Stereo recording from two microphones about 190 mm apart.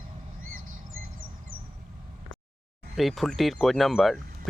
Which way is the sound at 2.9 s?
Centre (ahead or behind).